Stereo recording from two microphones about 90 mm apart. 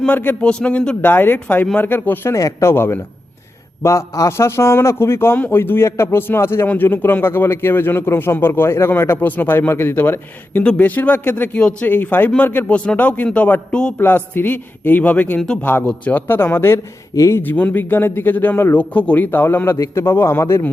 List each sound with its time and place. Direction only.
0.1 s a man's voice: 20° left (ahead or behind)
2.3 s a man's voice: 30° left (ahead or behind); by 13.9 s 10° left (ahead or behind)
14.0 s a man's voice: 25° left (ahead or behind)
17.4 s a man's voice: 20° left (ahead or behind)